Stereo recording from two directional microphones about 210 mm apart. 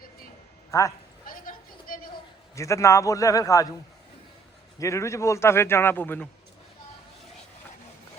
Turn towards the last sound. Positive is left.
turn(degrees=10)  # may be behind; listen again after turning